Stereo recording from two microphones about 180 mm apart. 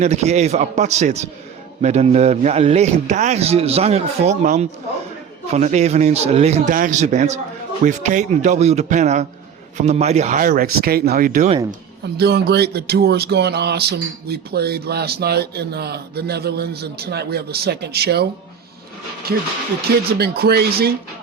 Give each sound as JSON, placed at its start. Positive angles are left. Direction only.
{"t": 0.0, "sound": "a man's voice", "side_deg": -40}
{"t": 12.1, "sound": "speech", "side_deg": -65}
{"t": 20.1, "sound": "speech", "side_deg": -60}